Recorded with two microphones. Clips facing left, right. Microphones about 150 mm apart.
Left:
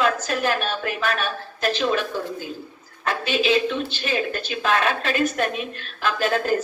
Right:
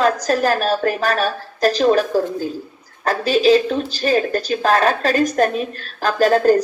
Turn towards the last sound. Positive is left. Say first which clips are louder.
# right 8 dB
turn(degrees=-40)  # may be behind; listen again after turning